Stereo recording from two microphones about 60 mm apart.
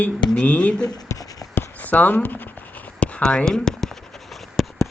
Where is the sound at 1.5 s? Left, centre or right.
Left.